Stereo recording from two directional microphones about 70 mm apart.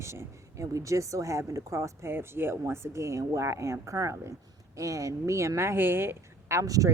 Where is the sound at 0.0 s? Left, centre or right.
Right.